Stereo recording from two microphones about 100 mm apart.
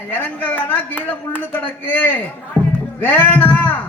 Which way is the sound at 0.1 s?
20° left (ahead or behind).